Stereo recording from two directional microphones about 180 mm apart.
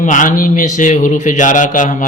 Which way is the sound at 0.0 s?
45° left (ahead or behind).